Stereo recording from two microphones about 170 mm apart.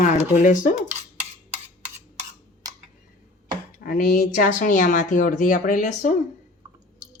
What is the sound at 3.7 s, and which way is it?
Speech, 55° left (ahead or behind).